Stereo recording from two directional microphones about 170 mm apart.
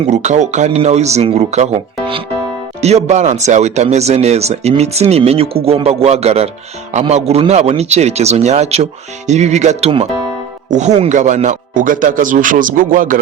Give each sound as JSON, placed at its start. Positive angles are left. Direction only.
{"t": 0.0, "sound": "speech", "side_deg": -45}